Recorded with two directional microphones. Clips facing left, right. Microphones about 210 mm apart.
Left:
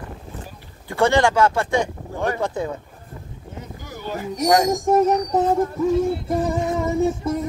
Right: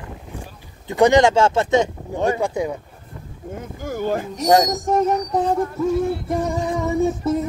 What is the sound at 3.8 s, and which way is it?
Speech, 50° right (ahead or behind).